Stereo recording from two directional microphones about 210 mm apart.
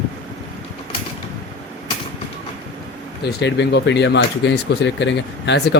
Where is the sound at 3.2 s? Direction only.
55° left (ahead or behind).